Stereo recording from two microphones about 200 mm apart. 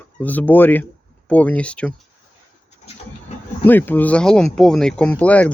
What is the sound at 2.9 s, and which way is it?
Bird, 30° left (ahead or behind).